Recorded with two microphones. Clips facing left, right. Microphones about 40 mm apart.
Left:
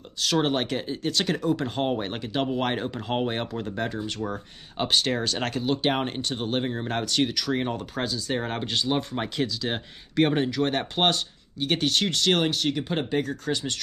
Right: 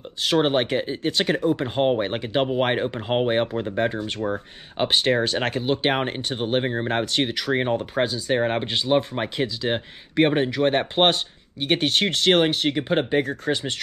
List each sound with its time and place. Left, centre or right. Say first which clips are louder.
0.2 s speech: right 4 dB; right